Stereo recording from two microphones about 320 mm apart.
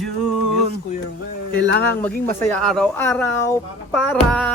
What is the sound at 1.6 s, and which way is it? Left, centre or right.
Speech, right.